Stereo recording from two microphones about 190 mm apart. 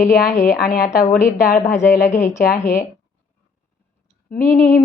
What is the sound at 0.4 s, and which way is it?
A woman's voice, 50° left (ahead or behind).